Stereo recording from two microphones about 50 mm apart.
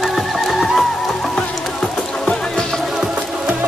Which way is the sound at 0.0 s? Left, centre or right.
Centre.